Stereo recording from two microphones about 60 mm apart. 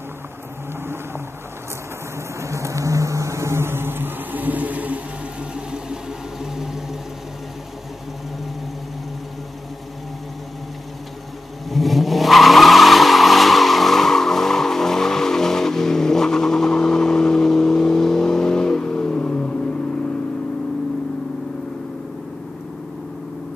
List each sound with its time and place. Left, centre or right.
2.4 s vehicle: right
5.5 s vehicle: centre
11.7 s vehicle: centre